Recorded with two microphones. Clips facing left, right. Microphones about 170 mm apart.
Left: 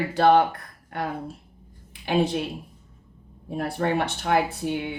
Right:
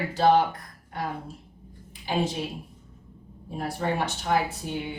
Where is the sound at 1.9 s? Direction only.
60° left (ahead or behind).